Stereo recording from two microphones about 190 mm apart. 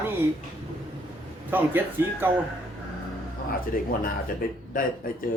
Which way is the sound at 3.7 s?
50° left (ahead or behind).